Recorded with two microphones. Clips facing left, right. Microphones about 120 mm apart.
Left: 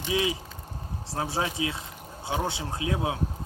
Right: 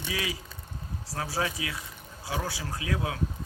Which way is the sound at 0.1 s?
25° left (ahead or behind).